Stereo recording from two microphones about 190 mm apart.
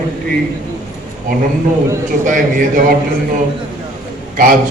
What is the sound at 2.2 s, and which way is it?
Speech, 40° right (ahead or behind).